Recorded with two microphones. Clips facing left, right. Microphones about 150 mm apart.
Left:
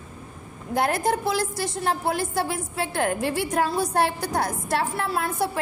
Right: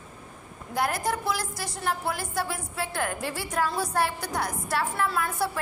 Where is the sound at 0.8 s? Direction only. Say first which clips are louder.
Left 4 dB; 25° left (ahead or behind).